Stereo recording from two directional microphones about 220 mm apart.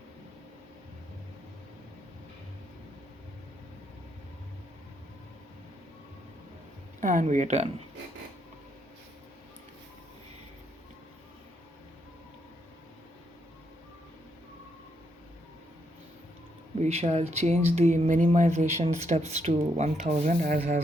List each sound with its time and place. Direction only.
7.0 s speech: 35° right (ahead or behind)
16.7 s speech: 30° right (ahead or behind)